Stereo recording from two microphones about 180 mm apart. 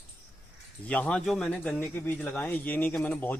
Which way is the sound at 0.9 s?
5° left (ahead or behind).